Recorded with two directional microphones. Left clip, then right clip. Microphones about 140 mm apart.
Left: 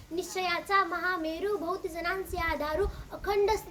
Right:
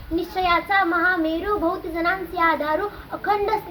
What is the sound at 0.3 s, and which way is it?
A child's voice, 60° left (ahead or behind).